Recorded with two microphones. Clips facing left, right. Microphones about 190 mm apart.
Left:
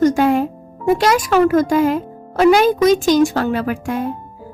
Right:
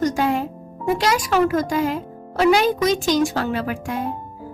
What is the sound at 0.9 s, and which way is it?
Speech, 50° left (ahead or behind).